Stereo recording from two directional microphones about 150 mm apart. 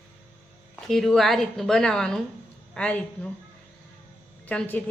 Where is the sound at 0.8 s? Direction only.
Centre (ahead or behind).